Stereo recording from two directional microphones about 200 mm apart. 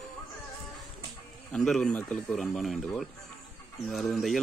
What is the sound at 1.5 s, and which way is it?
Speech, 5° left (ahead or behind).